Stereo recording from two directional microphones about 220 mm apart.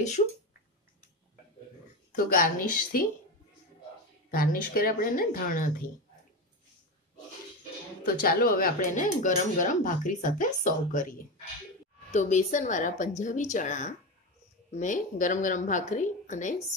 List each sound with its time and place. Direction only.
2.1 s speech: 40° left (ahead or behind)
4.3 s speech: 40° left (ahead or behind)
8.0 s speech: 40° left (ahead or behind)